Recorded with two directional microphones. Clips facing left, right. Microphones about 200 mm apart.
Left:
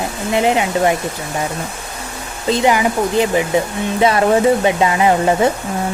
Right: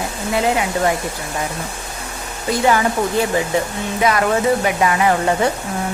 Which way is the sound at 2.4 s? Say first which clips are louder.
Left 2 dB; 20° left (ahead or behind).